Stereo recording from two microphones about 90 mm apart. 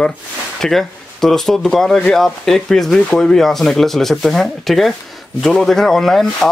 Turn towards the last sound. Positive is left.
turn(degrees=5)  # may be behind; listen again after turning